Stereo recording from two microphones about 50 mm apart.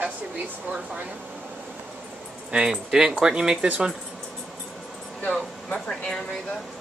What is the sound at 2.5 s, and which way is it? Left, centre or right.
Speech, centre.